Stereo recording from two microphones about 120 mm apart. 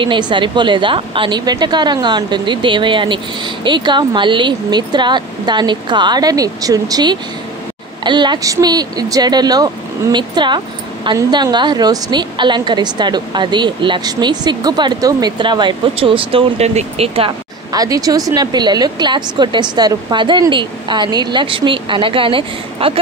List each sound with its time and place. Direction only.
0.0 s a woman's voice: 40° right (ahead or behind)
17.7 s a woman's voice: 30° right (ahead or behind); by 22.9 s 50° right (ahead or behind)